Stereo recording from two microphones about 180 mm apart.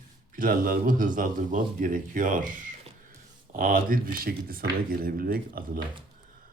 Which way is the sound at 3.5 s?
50° right (ahead or behind).